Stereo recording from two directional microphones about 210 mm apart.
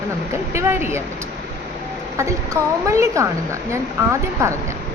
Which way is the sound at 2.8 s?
15° right (ahead or behind).